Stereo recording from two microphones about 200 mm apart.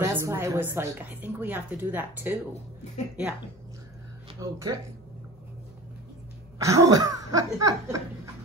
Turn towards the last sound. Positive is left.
turn(degrees=-15)  # may be behind; listen again after turning